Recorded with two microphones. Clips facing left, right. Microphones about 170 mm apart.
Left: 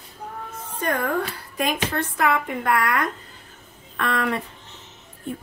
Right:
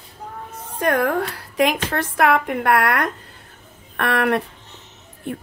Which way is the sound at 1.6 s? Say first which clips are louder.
Right 5 dB; 80° right.